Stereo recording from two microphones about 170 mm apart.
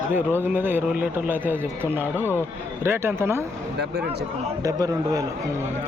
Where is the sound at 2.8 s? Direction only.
15° right (ahead or behind).